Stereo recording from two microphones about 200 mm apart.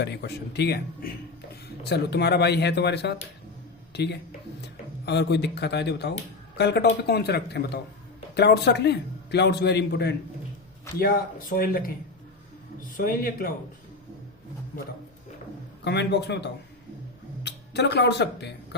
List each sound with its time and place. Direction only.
0.0 s a man's voice: 55° left (ahead or behind)
11.0 s speech: 45° left (ahead or behind)
15.8 s a man's voice: 60° left (ahead or behind)